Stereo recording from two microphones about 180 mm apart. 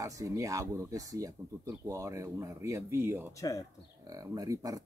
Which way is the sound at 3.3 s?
20° left (ahead or behind).